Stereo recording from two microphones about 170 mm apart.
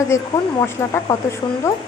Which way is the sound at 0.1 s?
15° left (ahead or behind).